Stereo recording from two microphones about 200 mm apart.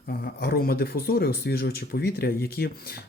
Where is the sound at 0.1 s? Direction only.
50° left (ahead or behind).